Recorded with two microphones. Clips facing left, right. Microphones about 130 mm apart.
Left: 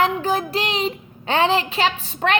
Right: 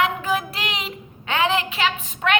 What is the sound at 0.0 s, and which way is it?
Child singing, 35° left (ahead or behind).